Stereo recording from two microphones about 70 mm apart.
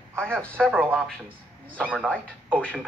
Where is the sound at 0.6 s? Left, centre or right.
Centre.